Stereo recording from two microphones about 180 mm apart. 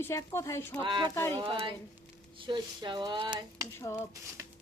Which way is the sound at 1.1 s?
15° left (ahead or behind).